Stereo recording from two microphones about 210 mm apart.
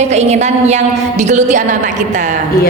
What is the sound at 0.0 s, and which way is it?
A woman's voice, 30° right (ahead or behind).